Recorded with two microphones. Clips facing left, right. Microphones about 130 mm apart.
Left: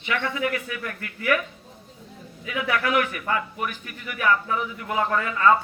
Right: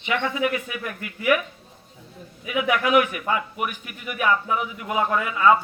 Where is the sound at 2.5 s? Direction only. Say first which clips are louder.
Right 3 dB; 15° right (ahead or behind).